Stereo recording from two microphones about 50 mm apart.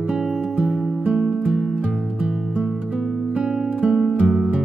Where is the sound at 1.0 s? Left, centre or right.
Right.